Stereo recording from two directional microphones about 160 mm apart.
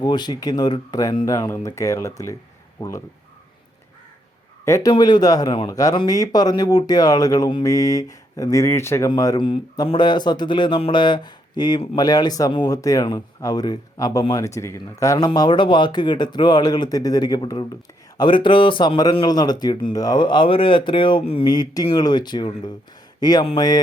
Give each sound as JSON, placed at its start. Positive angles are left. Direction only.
{"t": 0.0, "sound": "speech", "side_deg": 25}
{"t": 4.6, "sound": "speech", "side_deg": 20}